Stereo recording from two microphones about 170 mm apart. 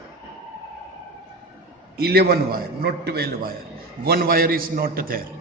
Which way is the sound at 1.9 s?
65° right (ahead or behind).